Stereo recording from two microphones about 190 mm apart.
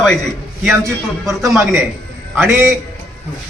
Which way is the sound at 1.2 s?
Centre (ahead or behind).